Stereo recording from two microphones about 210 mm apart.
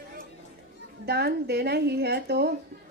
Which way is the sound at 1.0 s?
50° right (ahead or behind).